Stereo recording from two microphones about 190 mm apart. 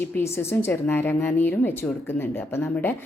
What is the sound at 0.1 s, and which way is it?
A woman's voice, 15° left (ahead or behind).